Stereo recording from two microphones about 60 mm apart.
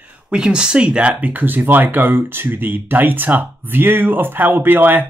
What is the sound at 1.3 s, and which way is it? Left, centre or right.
Speech, right.